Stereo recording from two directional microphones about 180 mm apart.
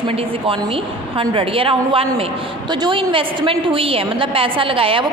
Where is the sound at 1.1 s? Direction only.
30° right (ahead or behind).